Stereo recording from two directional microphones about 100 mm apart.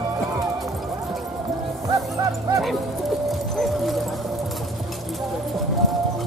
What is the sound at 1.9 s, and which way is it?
Speech, 35° right (ahead or behind).